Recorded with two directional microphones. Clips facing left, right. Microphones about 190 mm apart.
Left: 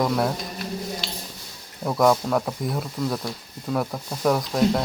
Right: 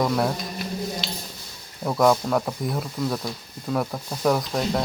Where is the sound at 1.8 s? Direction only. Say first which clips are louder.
Even; centre (ahead or behind).